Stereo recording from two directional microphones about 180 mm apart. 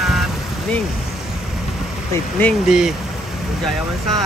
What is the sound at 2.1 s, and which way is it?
Speech, 10° left (ahead or behind).